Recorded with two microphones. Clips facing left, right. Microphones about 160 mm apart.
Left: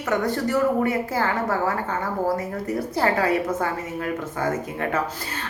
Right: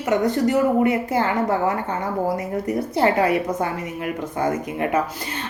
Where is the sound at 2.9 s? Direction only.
20° right (ahead or behind).